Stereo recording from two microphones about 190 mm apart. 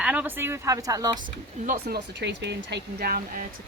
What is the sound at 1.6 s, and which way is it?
Speech, 55° right (ahead or behind).